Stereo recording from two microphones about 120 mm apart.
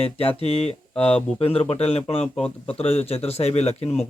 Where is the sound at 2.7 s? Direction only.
55° left (ahead or behind).